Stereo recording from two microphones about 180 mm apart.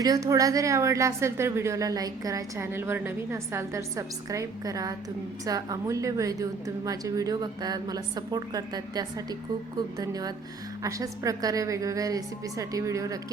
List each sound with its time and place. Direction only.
0.0 s a woman's voice: 20° right (ahead or behind)